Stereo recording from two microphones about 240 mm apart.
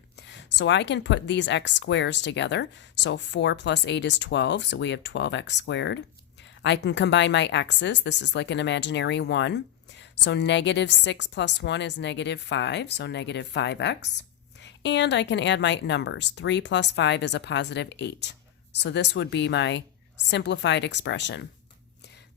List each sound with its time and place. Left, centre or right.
0.2 s a woman's voice: left